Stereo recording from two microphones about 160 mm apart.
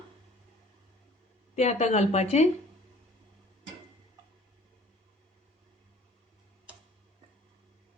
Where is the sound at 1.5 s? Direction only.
45° left (ahead or behind).